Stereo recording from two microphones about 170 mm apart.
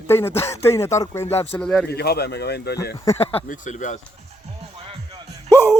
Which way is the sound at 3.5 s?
45° left (ahead or behind).